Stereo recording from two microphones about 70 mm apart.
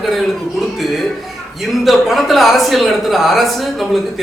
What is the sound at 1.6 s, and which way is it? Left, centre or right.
A man's voice, centre.